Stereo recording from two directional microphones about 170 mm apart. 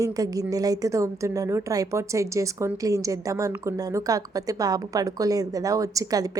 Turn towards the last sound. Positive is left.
turn(degrees=-20)  # may be behind; listen again after turning